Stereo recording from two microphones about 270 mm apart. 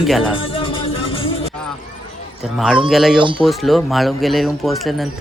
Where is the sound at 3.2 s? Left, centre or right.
Centre.